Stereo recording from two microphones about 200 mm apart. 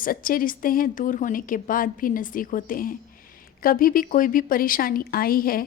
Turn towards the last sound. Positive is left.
turn(degrees=45)  # may be behind; listen again after turning